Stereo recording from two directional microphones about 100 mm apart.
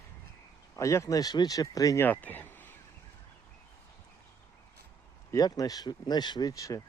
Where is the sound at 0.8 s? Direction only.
30° left (ahead or behind).